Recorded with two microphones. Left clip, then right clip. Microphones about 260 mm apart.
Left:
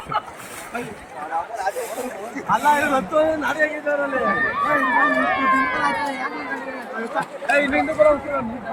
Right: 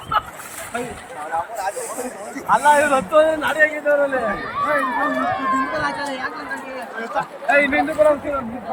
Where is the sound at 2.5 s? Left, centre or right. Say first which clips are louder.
Right 3 dB; centre.